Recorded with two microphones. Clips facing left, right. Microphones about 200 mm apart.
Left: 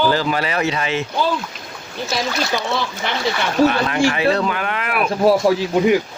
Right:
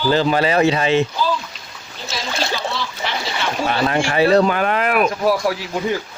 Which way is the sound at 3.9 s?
35° right (ahead or behind).